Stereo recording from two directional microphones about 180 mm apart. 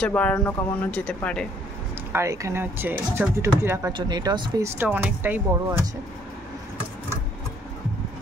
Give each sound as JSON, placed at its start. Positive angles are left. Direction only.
{"t": 0.0, "sound": "speech", "side_deg": 5}
{"t": 2.1, "sound": "speech", "side_deg": -15}